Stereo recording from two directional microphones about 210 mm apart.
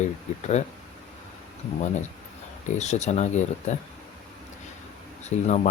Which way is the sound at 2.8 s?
35° left (ahead or behind).